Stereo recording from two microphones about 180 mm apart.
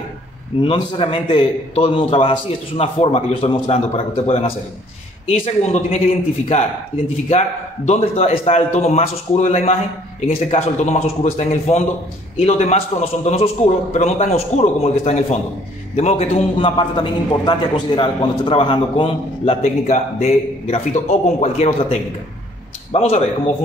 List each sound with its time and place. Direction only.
0.6 s a man's voice: 30° left (ahead or behind)
22.9 s a man's voice: 35° left (ahead or behind)